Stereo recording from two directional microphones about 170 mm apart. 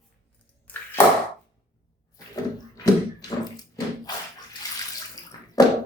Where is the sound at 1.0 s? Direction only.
10° left (ahead or behind).